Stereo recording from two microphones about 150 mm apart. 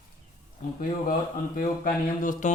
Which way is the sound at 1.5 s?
65° left (ahead or behind).